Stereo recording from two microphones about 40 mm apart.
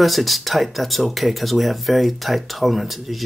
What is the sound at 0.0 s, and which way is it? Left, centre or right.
Speech, centre.